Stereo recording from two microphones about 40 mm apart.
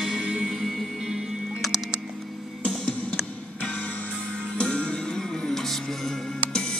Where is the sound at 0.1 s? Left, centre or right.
Centre.